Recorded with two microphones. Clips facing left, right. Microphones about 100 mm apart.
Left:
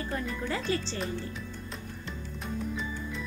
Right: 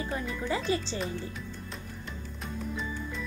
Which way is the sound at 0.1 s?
10° right (ahead or behind).